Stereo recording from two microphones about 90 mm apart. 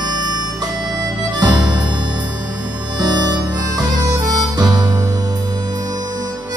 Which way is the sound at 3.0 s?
50° right (ahead or behind).